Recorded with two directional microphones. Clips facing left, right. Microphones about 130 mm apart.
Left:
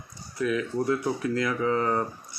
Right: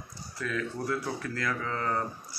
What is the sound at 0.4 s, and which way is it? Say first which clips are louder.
Speech: left 7 dB; 15° left (ahead or behind).